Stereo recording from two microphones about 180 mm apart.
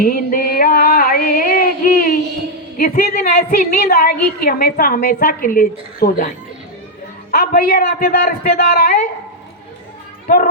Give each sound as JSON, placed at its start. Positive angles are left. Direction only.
{"t": 0.0, "sound": "a sound", "side_deg": 55}
{"t": 2.7, "sound": "a woman's voice", "side_deg": 50}
{"t": 10.2, "sound": "a woman's voice", "side_deg": 50}